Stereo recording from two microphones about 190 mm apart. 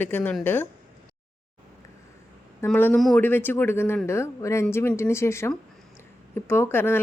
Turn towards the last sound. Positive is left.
turn(degrees=10)  # may be behind; listen again after turning